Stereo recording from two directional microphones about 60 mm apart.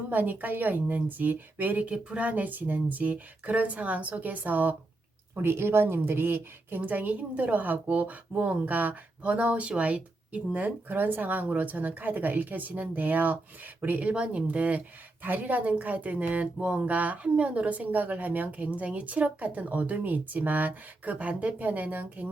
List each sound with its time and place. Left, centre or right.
0.1 s a woman's voice: right
5.3 s a woman's voice: right